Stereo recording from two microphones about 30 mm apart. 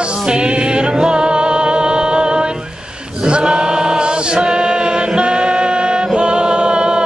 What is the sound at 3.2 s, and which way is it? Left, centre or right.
Chant, right.